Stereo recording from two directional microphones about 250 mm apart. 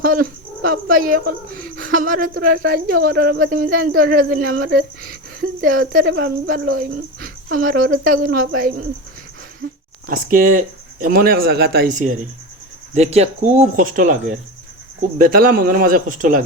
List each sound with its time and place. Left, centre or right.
0.0 s speech: right
10.1 s speech: right